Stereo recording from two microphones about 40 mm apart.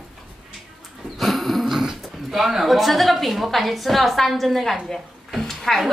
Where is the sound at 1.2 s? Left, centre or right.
Centre.